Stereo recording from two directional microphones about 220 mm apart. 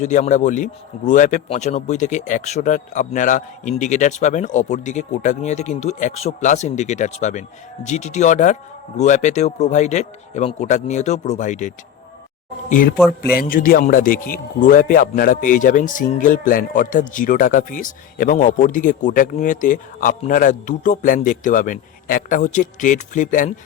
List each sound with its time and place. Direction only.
0.0 s a man's voice: 35° left (ahead or behind)